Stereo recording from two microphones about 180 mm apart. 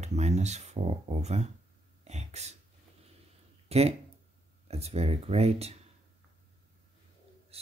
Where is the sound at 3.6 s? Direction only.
35° right (ahead or behind).